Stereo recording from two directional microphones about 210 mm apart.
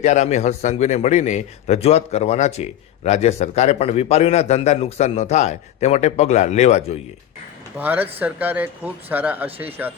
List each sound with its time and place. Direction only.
0.0 s a man's voice: 35° left (ahead or behind)
7.8 s speech: 10° right (ahead or behind)